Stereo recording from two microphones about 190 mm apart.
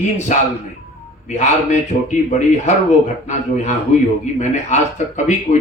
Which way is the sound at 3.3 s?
35° left (ahead or behind).